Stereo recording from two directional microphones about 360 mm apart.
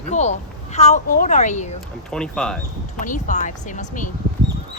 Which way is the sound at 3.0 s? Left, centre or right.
Left.